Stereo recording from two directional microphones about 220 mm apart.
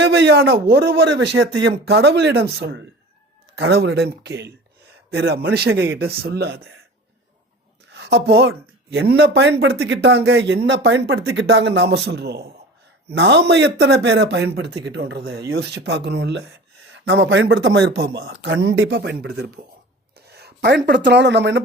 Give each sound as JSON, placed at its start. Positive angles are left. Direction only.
{"t": 0.0, "sound": "a man's voice", "side_deg": -50}
{"t": 7.9, "sound": "a man's voice", "side_deg": -50}
{"t": 18.5, "sound": "a man's voice", "side_deg": -60}
{"t": 20.1, "sound": "a sound", "side_deg": -45}
{"t": 20.8, "sound": "a man's voice", "side_deg": -50}